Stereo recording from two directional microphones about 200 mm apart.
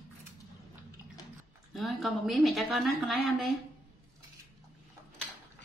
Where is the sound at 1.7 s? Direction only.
Centre (ahead or behind).